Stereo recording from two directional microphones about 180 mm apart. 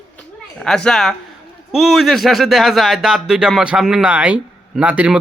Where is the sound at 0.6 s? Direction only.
5° left (ahead or behind).